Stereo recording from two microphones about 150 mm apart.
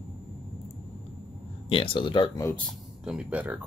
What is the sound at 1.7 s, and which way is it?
Speech, 35° left (ahead or behind).